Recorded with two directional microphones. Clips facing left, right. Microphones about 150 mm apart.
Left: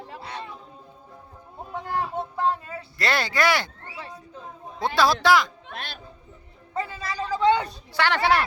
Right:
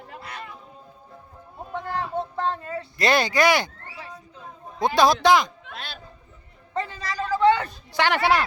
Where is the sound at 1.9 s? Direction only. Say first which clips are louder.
Even; 10° left (ahead or behind).